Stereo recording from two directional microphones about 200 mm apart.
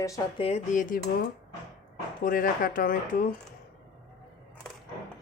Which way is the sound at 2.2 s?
45° left (ahead or behind).